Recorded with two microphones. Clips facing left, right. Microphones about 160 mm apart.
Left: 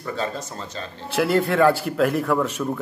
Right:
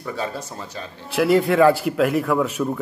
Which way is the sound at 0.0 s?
10° right (ahead or behind).